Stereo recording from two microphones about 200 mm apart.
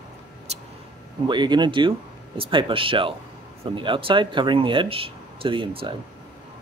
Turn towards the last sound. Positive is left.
turn(degrees=-25)  # may be behind; listen again after turning